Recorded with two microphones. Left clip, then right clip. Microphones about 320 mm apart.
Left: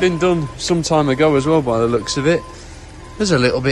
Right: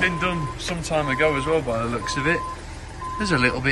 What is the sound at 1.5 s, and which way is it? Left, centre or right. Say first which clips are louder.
Speech: left 7 dB; right.